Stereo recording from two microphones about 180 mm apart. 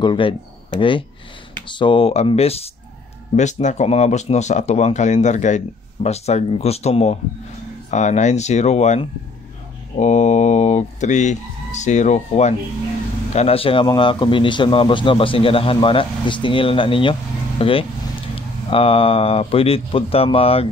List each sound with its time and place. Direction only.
0.0 s a man's voice: 30° left (ahead or behind)